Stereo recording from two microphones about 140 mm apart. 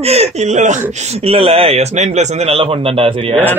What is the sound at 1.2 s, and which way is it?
A man's voice, 45° right (ahead or behind).